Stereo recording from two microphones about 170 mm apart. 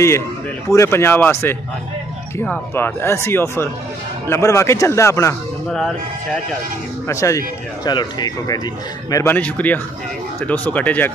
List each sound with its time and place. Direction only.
0.7 s speech: 15° left (ahead or behind)
7.1 s speech: 20° left (ahead or behind)
9.1 s speech: 15° left (ahead or behind)